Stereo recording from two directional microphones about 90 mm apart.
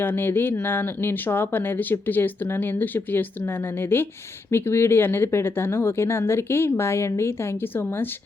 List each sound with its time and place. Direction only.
0.0 s speech: 25° left (ahead or behind)